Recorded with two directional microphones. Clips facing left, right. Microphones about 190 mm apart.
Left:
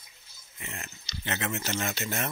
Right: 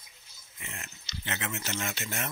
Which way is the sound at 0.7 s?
35° left (ahead or behind).